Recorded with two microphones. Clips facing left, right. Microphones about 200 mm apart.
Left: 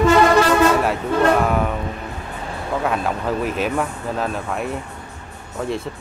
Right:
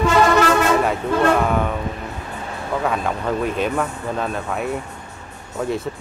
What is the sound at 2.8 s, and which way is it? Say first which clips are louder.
Speech: even; centre (ahead or behind).